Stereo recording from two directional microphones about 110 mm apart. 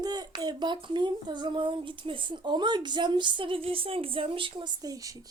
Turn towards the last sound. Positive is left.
turn(degrees=-30)  # may be behind; listen again after turning